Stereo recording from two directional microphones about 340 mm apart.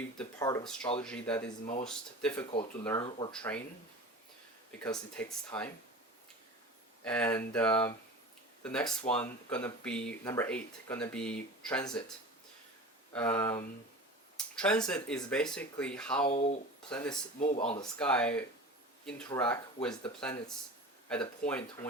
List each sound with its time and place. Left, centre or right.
0.2 s speech: centre
4.8 s speech: centre
7.0 s speech: centre
13.1 s speech: centre
14.3 s a sound: centre
15.1 s speech: centre
16.2 s speech: centre
16.9 s speech: centre